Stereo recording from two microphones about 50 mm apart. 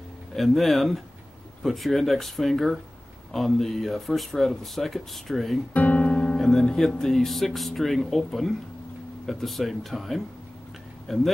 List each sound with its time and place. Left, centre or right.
0.4 s speech: centre
5.7 s music: left
6.3 s speech: centre